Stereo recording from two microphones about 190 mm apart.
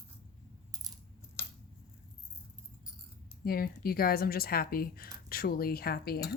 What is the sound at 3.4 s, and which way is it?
A woman's voice, 50° left (ahead or behind).